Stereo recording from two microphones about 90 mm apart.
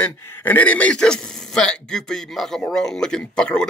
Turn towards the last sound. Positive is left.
turn(degrees=10)  # may be behind; listen again after turning